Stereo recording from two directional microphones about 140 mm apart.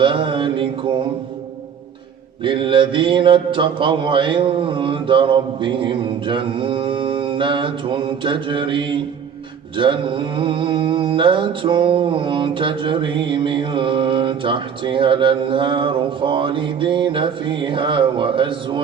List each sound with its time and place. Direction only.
0.0 s mantra: 35° right (ahead or behind)
2.4 s mantra: 35° right (ahead or behind)